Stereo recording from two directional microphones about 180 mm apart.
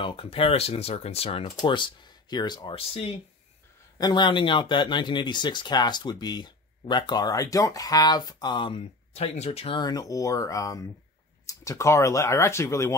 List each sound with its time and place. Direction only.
0.0 s speech: 30° left (ahead or behind); by 12.9 s 15° left (ahead or behind)